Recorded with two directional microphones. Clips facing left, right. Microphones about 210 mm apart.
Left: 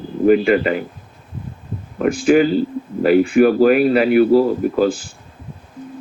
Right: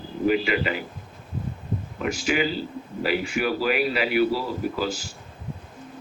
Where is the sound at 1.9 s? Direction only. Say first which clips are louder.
Left 12 dB; 55° left (ahead or behind).